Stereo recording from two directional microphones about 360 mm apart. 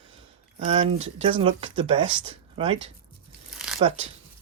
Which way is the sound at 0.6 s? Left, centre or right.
Centre.